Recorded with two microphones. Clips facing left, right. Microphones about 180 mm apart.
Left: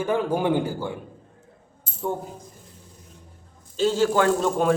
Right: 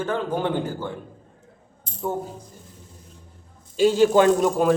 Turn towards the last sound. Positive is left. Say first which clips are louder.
# right 4 dB
turn(degrees=-20)  # may be behind; listen again after turning